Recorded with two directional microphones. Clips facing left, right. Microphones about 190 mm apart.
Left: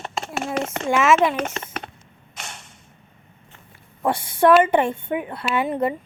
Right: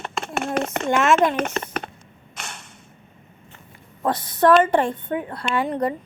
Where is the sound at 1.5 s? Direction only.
55° right (ahead or behind).